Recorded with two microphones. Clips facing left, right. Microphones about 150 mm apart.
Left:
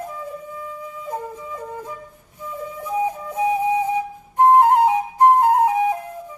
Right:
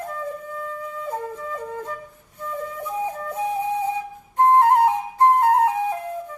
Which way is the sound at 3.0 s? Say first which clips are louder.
Left 5 dB; 15° left (ahead or behind).